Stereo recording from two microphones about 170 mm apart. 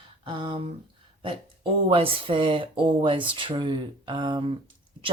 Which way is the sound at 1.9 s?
30° right (ahead or behind).